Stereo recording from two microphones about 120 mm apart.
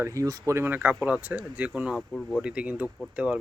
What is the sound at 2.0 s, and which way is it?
Speech, 5° left (ahead or behind).